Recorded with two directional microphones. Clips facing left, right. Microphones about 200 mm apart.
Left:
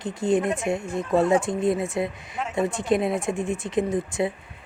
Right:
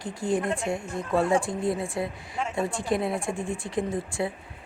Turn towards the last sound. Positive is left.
turn(degrees=20)  # may be behind; listen again after turning